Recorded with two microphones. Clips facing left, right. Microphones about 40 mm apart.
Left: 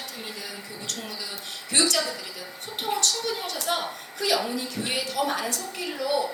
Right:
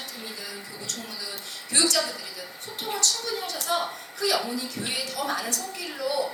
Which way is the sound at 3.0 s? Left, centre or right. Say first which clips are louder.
Left 1 dB; left.